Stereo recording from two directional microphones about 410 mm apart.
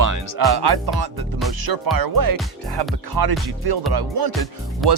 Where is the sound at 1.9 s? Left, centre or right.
Right.